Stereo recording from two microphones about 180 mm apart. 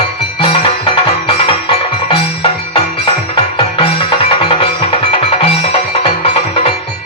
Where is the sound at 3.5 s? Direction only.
30° left (ahead or behind).